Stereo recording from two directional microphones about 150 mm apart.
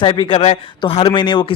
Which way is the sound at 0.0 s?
35° left (ahead or behind).